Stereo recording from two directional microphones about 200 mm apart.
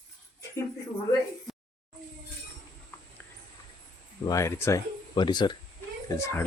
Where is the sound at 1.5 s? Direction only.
Centre (ahead or behind).